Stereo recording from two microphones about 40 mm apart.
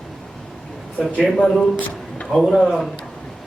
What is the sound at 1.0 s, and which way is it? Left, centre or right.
Speech, centre.